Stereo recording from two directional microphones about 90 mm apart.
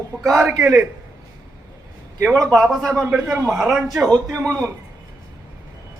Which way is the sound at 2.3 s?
5° left (ahead or behind).